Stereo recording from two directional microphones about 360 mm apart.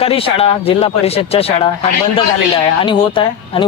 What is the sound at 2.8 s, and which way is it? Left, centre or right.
Speech, centre.